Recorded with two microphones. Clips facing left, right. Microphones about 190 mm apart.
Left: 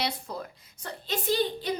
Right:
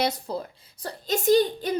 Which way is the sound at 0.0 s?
40° right (ahead or behind).